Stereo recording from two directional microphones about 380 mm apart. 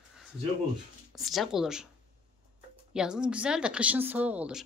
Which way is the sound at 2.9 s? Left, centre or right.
Centre.